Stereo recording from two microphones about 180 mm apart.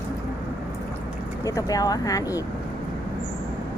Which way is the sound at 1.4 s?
20° left (ahead or behind).